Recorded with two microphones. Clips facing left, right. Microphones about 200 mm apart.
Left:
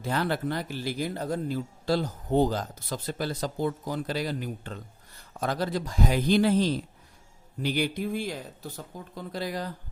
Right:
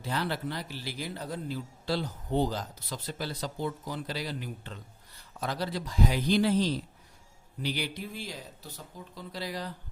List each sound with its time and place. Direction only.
0.0 s speech: 50° left (ahead or behind)